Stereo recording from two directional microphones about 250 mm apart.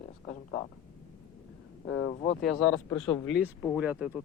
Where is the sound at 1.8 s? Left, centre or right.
Left.